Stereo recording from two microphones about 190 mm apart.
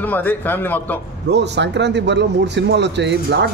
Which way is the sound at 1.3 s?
65° right (ahead or behind).